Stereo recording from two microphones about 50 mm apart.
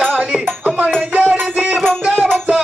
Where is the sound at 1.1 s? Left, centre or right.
Right.